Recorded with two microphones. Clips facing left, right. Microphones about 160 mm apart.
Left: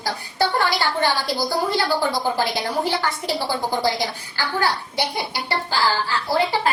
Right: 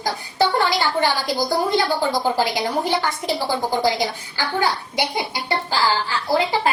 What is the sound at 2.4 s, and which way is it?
A woman's voice, 15° right (ahead or behind).